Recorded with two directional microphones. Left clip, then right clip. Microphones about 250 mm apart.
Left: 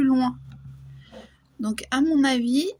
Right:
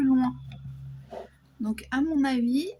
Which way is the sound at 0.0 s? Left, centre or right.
Left.